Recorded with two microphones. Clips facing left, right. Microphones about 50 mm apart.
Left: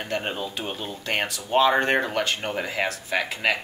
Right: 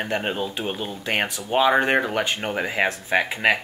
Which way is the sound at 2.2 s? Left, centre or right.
Centre.